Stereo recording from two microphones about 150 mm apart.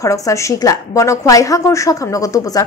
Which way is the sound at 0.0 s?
20° left (ahead or behind).